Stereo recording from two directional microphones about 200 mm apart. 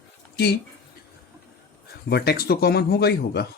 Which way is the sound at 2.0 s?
55° left (ahead or behind).